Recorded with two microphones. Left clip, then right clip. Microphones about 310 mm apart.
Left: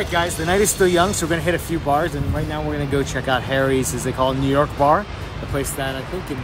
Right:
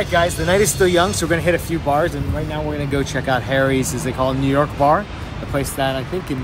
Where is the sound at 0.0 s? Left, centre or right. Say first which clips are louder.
Right 3 dB; centre.